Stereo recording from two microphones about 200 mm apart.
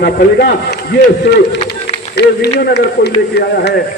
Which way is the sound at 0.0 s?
55° left (ahead or behind).